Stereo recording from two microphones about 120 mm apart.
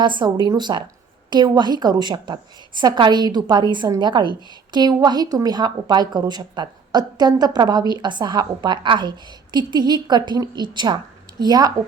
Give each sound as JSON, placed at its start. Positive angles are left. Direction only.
{"t": 0.0, "sound": "a woman's voice", "side_deg": -40}